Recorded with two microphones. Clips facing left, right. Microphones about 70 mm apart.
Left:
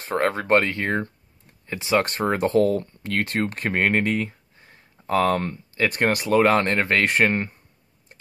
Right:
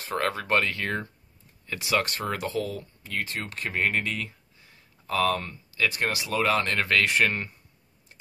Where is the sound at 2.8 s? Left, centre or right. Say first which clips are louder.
Left 7 dB; left.